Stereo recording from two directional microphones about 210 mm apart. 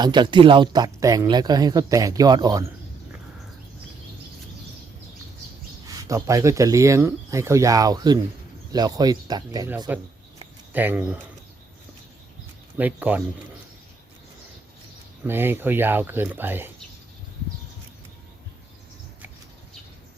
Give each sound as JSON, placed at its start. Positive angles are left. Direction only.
{"t": 0.0, "sound": "speech", "side_deg": -20}
{"t": 5.8, "sound": "speech", "side_deg": -15}
{"t": 10.7, "sound": "speech", "side_deg": -10}
{"t": 12.7, "sound": "speech", "side_deg": -10}
{"t": 15.2, "sound": "speech", "side_deg": -10}